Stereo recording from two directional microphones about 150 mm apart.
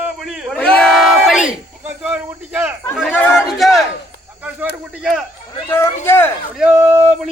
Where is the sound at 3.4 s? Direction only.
Centre (ahead or behind).